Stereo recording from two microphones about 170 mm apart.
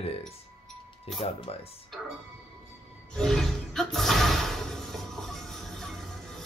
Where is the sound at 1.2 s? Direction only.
35° left (ahead or behind).